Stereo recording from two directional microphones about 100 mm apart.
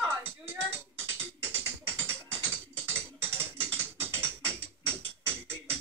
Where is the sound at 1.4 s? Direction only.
25° right (ahead or behind).